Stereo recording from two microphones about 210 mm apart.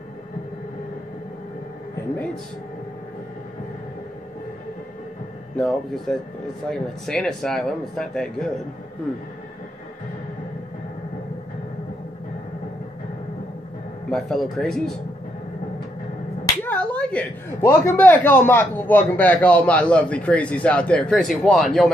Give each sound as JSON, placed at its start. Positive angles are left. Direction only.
{"t": 5.6, "sound": "speech", "side_deg": 0}
{"t": 14.1, "sound": "speech", "side_deg": 0}
{"t": 16.6, "sound": "speech", "side_deg": 5}